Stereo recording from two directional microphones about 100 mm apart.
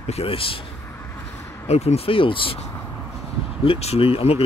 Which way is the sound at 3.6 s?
80° left.